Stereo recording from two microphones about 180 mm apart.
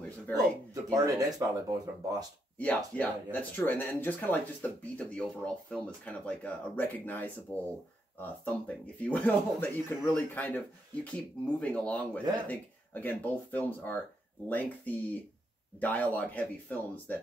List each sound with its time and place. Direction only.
0.3 s speech: 10° left (ahead or behind)
0.8 s speech: 20° right (ahead or behind)
2.5 s speech: 10° left (ahead or behind)